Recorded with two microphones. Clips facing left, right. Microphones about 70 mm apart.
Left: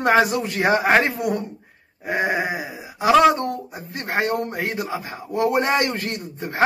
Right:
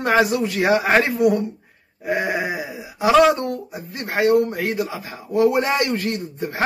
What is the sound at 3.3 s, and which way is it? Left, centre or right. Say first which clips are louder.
A man's voice: even; left.